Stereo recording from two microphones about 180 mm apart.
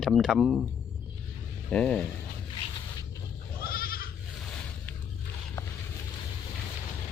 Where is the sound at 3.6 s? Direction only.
55° left (ahead or behind).